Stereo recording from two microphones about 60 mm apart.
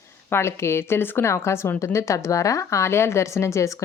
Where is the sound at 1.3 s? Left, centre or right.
Left.